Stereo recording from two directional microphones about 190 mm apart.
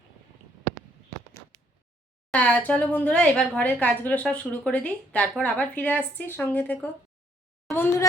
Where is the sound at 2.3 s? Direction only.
5° left (ahead or behind).